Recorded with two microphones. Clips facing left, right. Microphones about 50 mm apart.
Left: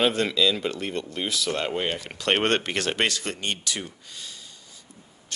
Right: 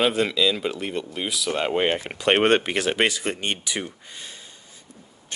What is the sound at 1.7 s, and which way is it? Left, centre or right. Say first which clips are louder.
Speech: right 5 dB; right.